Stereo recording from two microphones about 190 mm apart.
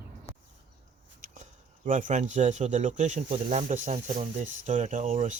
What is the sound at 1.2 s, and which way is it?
Speech, 45° right (ahead or behind).